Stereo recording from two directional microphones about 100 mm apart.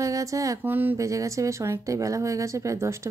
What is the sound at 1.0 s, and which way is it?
Speech, 35° right (ahead or behind).